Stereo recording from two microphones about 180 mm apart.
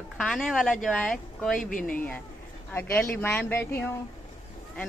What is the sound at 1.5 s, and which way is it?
Speech, 50° left (ahead or behind).